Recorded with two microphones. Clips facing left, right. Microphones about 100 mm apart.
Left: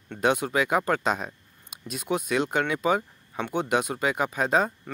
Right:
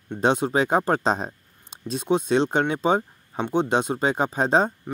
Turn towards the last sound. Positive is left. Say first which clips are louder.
# right 3 dB
turn(degrees=-30)  # may be behind; listen again after turning